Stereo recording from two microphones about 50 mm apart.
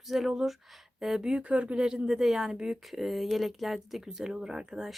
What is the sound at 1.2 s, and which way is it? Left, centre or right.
Speech, right.